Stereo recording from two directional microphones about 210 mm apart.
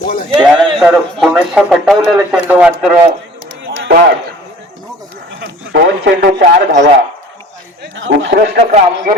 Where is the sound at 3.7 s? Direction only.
55° right (ahead or behind).